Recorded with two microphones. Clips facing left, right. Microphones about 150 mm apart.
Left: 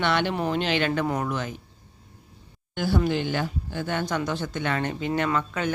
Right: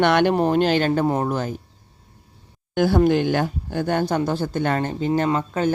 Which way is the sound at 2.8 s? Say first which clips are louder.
Right 7 dB; 50° right (ahead or behind).